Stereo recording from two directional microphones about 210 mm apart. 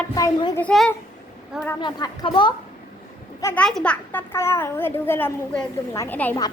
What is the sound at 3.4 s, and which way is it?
A child's voice, 15° left (ahead or behind).